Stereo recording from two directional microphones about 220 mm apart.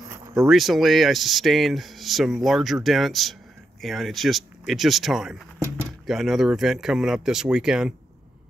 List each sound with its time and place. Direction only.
0.1 s insect: 15° right (ahead or behind)
0.5 s speech: centre (ahead or behind)